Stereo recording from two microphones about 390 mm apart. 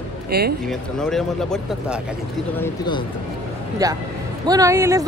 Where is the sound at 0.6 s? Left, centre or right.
Centre.